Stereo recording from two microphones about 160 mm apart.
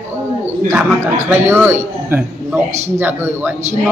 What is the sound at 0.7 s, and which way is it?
A man's voice, 15° right (ahead or behind).